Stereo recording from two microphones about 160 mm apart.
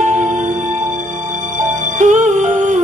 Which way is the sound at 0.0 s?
50° right (ahead or behind).